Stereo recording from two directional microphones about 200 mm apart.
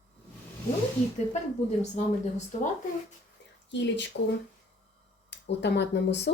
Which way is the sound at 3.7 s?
65° left (ahead or behind).